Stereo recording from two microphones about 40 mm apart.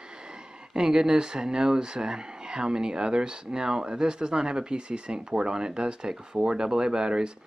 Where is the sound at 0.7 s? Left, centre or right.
Centre.